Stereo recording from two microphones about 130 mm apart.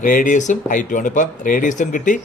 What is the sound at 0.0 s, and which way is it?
Speech, 90° left.